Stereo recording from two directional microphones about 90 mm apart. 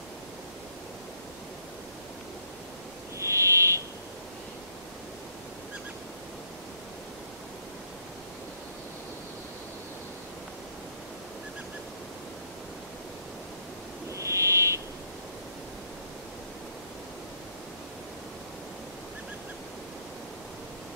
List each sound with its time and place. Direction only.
3.2 s owl: 30° right (ahead or behind)
14.1 s owl: 35° right (ahead or behind)